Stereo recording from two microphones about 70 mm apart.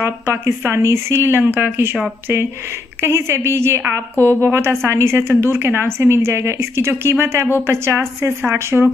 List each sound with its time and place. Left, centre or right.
0.0 s a woman's voice: right
1.4 s speech: right
3.0 s a woman's voice: right
4.2 s speech: left
4.5 s a woman's voice: right